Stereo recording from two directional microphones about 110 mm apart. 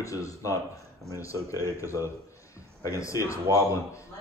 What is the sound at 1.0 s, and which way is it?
Speech, centre (ahead or behind).